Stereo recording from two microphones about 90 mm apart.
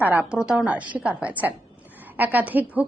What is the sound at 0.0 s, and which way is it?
A woman's voice, 20° right (ahead or behind).